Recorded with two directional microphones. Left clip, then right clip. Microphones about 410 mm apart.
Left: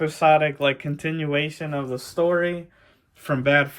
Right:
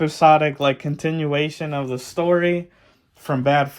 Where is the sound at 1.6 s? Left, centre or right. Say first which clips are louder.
Right 3 dB; right.